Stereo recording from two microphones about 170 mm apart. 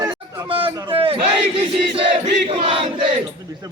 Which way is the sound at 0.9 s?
30° right (ahead or behind).